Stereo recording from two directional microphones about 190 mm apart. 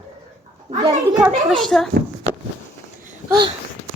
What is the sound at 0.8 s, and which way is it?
Speech, 20° right (ahead or behind).